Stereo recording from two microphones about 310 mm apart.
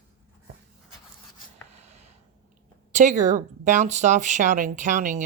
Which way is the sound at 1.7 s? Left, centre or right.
Right.